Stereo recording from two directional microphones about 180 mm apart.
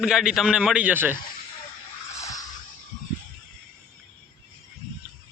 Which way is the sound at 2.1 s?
20° left (ahead or behind).